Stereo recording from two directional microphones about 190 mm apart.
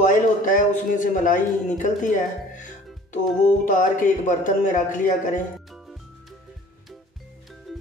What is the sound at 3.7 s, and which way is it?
Speech, 45° left (ahead or behind).